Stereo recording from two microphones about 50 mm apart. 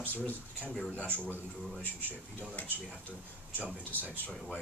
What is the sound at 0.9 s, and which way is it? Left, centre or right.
Speech, left.